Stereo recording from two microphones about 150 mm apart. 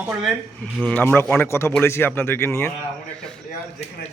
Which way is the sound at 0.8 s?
10° left (ahead or behind).